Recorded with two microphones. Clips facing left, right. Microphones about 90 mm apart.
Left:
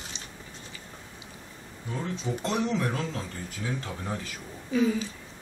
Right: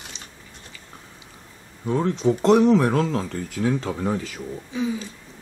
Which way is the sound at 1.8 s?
60° right (ahead or behind).